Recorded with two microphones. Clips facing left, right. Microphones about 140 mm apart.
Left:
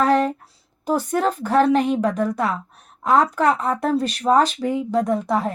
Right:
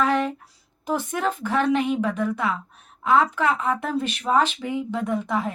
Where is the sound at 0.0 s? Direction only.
35° left (ahead or behind).